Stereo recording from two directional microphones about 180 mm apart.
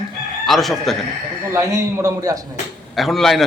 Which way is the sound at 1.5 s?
15° right (ahead or behind).